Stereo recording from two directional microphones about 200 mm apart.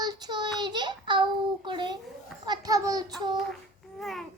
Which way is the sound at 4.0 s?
Centre (ahead or behind).